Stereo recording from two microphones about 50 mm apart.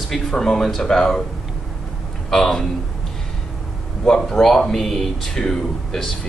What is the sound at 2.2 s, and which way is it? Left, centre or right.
Speech, centre.